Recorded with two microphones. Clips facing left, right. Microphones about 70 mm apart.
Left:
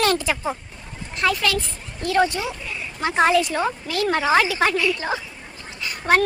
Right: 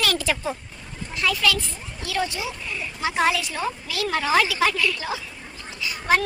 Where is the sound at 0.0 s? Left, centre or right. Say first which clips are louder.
Left 5 dB; left.